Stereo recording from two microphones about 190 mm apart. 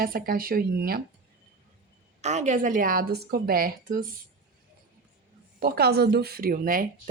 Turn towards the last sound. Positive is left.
turn(degrees=-45)  # may be behind; listen again after turning